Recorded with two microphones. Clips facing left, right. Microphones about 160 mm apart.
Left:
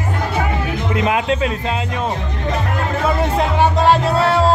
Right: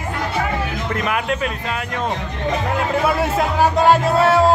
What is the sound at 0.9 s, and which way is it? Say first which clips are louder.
Speech: left 5 dB; 25° left (ahead or behind).